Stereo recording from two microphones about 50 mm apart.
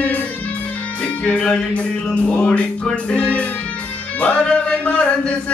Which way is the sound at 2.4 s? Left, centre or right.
Left.